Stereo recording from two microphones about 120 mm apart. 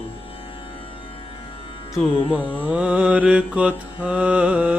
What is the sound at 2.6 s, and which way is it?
Mantra, 10° right (ahead or behind).